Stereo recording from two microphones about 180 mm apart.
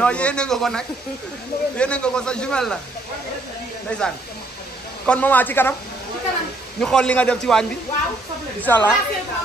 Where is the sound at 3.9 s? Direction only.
5° left (ahead or behind).